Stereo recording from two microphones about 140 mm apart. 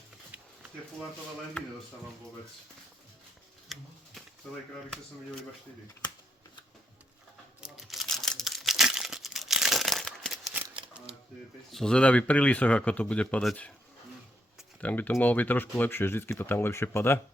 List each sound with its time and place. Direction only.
3.7 s a sound: centre (ahead or behind)
4.4 s speech: 5° left (ahead or behind)
7.6 s crumpling: centre (ahead or behind)
11.7 s speech: 5° left (ahead or behind)
14.8 s speech: 10° left (ahead or behind)